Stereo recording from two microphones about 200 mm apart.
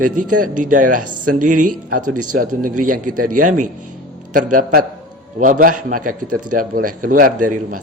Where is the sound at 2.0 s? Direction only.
90° right.